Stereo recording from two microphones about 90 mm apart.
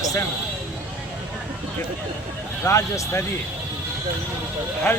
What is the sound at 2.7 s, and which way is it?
Speech, 35° left (ahead or behind).